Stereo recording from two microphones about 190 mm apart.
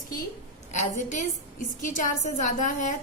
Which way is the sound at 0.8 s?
40° left (ahead or behind).